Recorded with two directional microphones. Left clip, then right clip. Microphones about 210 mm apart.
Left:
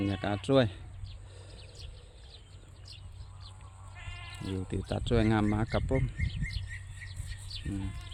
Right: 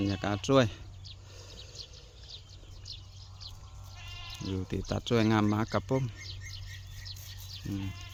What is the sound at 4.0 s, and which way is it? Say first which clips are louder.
Bleat: right 1 dB; 30° left (ahead or behind).